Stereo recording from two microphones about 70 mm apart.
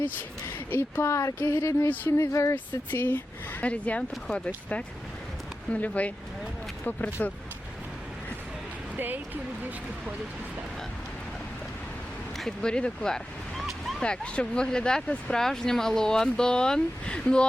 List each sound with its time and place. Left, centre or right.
0.7 s speech: left
1.0 s speech: left
1.4 s speech: left
2.0 s speech: left
2.9 s speech: left
9.0 s speech: right
12.4 s speech: centre